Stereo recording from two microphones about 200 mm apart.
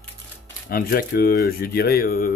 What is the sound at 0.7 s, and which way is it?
Speech, 45° left (ahead or behind).